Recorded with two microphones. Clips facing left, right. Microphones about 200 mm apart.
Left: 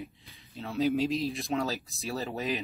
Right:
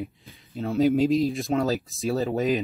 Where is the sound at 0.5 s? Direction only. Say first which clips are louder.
Right 8 dB; 35° right (ahead or behind).